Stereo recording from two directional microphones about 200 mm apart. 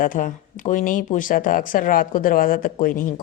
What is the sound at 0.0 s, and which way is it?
Speech, 40° left (ahead or behind).